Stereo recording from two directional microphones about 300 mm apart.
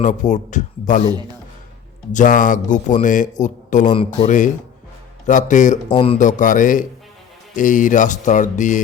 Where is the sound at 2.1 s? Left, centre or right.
Left.